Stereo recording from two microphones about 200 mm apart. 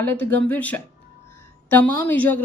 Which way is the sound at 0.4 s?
10° left (ahead or behind).